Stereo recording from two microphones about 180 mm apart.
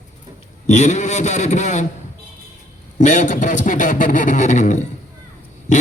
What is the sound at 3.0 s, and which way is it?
Speech, 45° left (ahead or behind).